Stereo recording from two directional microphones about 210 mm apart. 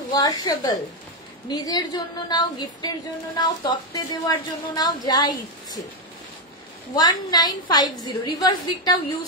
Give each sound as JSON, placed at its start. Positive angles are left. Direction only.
{"t": 0.1, "sound": "speech", "side_deg": 20}
{"t": 7.0, "sound": "speech", "side_deg": 20}